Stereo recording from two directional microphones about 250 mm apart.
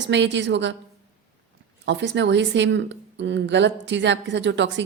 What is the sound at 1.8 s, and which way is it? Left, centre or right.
Speech, right.